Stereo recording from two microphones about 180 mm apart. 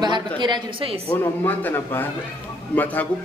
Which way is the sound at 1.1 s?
10° left (ahead or behind).